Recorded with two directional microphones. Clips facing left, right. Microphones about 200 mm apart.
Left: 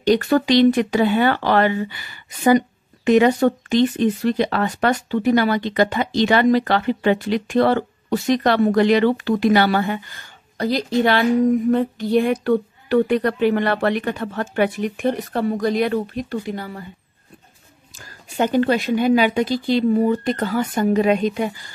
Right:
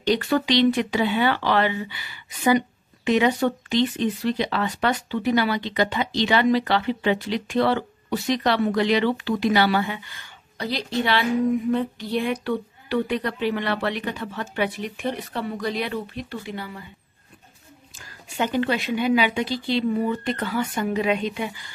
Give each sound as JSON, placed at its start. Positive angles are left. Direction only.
{"t": 0.0, "sound": "speech", "side_deg": 50}
{"t": 17.9, "sound": "speech", "side_deg": 45}